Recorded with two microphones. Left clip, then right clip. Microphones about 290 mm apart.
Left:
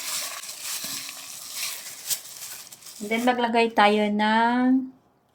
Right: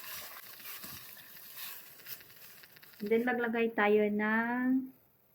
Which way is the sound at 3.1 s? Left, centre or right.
Left.